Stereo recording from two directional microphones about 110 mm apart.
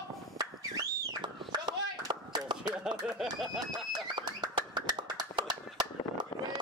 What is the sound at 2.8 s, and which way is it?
Speech, 5° right (ahead or behind).